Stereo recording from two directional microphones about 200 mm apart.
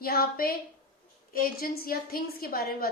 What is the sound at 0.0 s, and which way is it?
A woman's voice, 50° left (ahead or behind).